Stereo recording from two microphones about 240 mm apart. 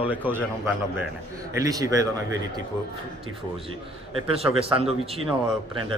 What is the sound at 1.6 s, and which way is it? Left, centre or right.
Speech, centre.